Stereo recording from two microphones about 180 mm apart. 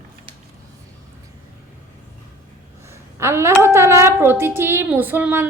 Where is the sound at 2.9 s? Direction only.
15° right (ahead or behind).